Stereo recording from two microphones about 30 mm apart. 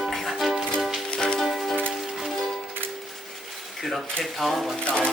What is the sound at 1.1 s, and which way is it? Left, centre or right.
Music, left.